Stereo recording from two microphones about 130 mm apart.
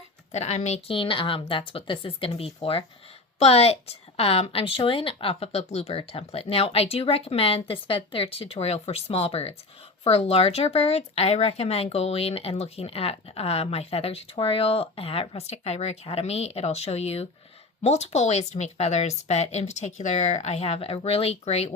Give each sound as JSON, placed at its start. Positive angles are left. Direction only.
{"t": 0.3, "sound": "speech", "side_deg": 60}
{"t": 0.9, "sound": "a woman's voice", "side_deg": 40}